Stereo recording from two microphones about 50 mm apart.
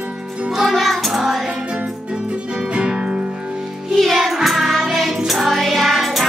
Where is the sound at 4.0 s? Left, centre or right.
Centre.